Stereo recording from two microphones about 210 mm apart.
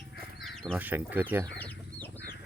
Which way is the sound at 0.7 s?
10° right (ahead or behind).